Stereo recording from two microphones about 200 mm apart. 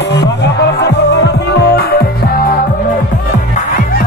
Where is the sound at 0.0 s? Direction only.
60° left (ahead or behind).